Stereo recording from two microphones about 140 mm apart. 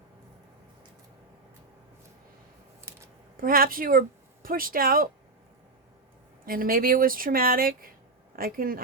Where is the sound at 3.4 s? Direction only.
90° right.